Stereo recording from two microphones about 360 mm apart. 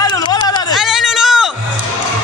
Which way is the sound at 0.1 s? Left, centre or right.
Centre.